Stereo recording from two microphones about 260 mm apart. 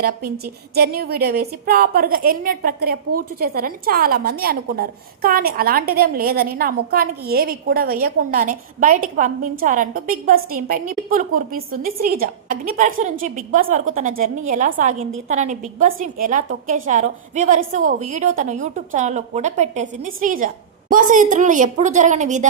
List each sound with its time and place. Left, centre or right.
0.0 s a woman's voice: right